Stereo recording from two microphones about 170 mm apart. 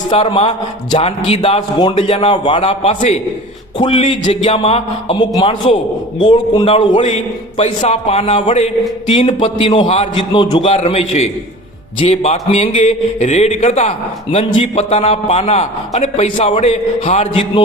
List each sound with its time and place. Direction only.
0.1 s a man's voice: 30° left (ahead or behind)
14.3 s a man's voice: 30° left (ahead or behind)